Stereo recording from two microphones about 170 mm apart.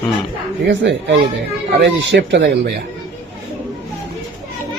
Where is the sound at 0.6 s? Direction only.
90° right.